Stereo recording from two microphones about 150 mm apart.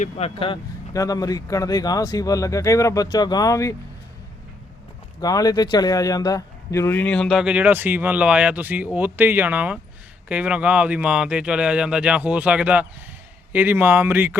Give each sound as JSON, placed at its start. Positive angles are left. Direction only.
{"t": 0.0, "sound": "speech", "side_deg": 40}
{"t": 0.9, "sound": "speech", "side_deg": 25}
{"t": 5.2, "sound": "a man's voice", "side_deg": 25}